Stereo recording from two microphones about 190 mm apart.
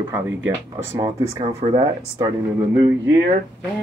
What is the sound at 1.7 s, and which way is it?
Speech, 25° right (ahead or behind).